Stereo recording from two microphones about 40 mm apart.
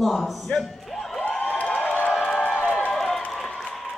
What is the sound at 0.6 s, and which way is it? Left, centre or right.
Music, centre.